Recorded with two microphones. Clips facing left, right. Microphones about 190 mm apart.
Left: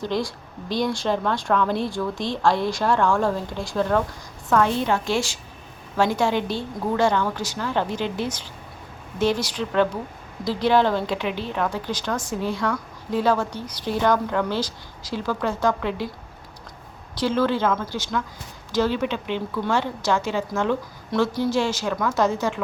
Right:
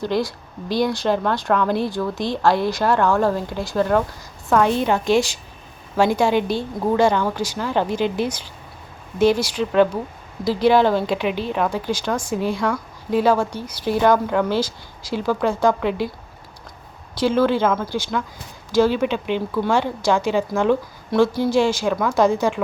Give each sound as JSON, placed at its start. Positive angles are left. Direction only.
{"t": 0.0, "sound": "speech", "side_deg": 0}
{"t": 4.4, "sound": "a woman's voice", "side_deg": -15}
{"t": 17.2, "sound": "a woman's voice", "side_deg": -10}